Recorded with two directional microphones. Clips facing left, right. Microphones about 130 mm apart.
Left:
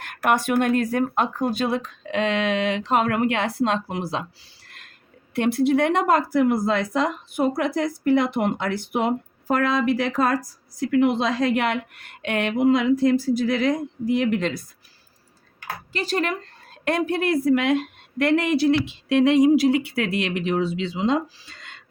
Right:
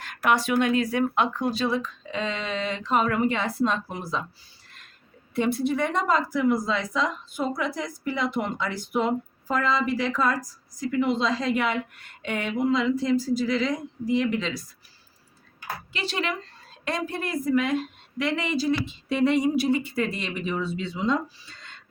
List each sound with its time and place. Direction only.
0.0 s speech: 55° left (ahead or behind); by 4.2 s 85° left
5.3 s a woman's voice: 75° left (ahead or behind); by 14.6 s 55° left (ahead or behind)
15.9 s a woman's voice: 40° left (ahead or behind); by 21.8 s 90° left